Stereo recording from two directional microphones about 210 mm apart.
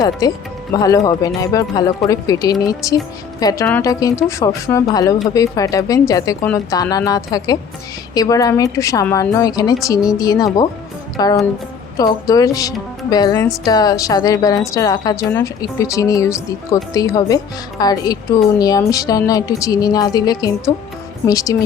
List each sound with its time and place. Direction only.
0.0 s a woman's voice: 15° left (ahead or behind)